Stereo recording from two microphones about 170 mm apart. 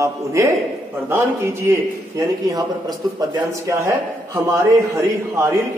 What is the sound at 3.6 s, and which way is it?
A man's voice, 20° right (ahead or behind).